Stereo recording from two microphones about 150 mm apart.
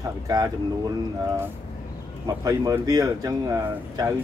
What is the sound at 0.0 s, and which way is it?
Speech, 25° right (ahead or behind).